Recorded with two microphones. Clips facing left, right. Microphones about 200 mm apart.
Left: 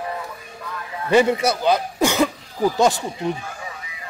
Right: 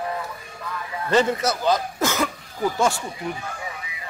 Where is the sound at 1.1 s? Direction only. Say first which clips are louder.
Left 4 dB; 10° left (ahead or behind).